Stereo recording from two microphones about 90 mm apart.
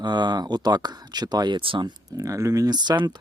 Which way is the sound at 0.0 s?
55° right (ahead or behind).